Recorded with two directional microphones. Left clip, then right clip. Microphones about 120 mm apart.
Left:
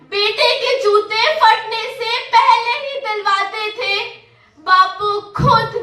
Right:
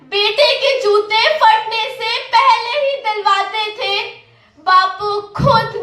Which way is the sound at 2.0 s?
30° right (ahead or behind).